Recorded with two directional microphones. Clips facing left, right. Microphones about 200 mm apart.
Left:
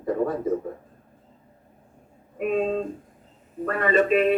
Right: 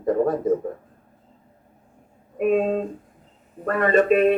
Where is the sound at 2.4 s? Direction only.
50° right (ahead or behind).